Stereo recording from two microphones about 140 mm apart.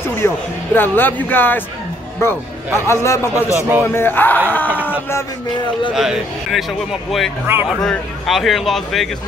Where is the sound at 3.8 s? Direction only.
15° left (ahead or behind).